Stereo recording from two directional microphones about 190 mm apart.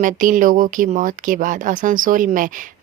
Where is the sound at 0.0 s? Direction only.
45° right (ahead or behind).